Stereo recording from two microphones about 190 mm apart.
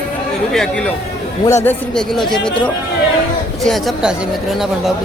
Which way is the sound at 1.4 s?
15° left (ahead or behind).